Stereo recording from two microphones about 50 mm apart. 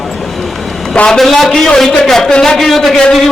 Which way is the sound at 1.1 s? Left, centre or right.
Centre.